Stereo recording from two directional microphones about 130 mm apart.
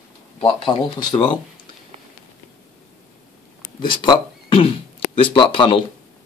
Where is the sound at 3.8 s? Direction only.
40° left (ahead or behind).